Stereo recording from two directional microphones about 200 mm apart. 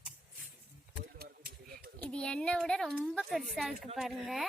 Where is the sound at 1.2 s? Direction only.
45° right (ahead or behind).